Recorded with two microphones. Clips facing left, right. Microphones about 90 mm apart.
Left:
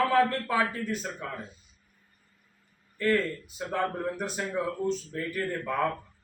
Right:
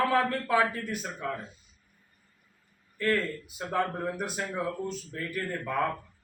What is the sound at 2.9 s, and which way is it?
A man's voice, centre (ahead or behind).